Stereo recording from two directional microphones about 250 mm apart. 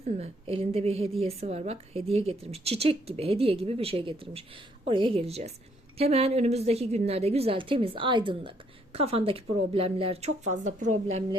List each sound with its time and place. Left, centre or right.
0.0 s a woman's voice: right